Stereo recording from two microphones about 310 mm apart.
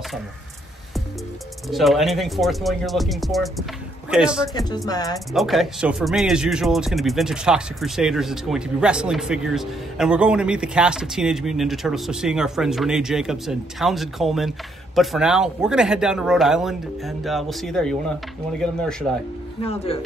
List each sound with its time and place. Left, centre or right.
1.7 s speech: centre
4.8 s speech: centre
5.3 s speech: centre
19.6 s speech: centre